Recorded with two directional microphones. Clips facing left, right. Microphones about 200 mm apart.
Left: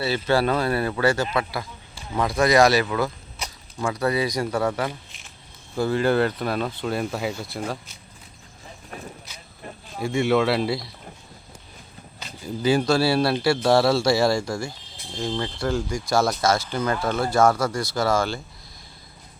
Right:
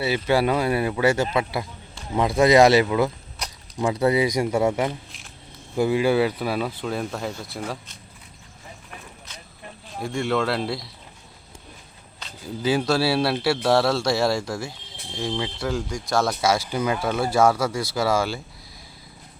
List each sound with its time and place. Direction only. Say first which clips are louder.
0.0 s speech: right 1 dB; 15° right (ahead or behind); by 7.9 s 5° left (ahead or behind)
10.0 s speech: left 3 dB; 5° left (ahead or behind)
12.2 s speech: left 2 dB; 5° right (ahead or behind)
16.5 s speech: even; 10° right (ahead or behind)